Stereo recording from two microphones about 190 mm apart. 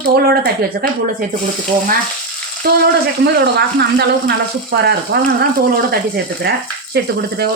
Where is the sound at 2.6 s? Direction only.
55° right (ahead or behind).